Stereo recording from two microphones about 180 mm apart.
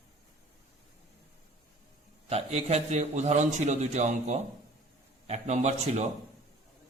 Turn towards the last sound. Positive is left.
turn(degrees=-40)  # may be behind; listen again after turning